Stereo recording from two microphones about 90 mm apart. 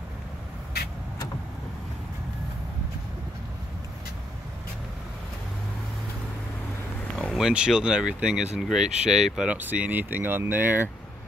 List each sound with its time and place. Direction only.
7.3 s speech: 10° right (ahead or behind)
9.6 s speech: 20° right (ahead or behind)